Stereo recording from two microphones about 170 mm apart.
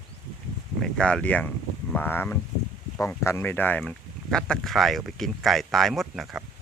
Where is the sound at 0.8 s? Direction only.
5° left (ahead or behind).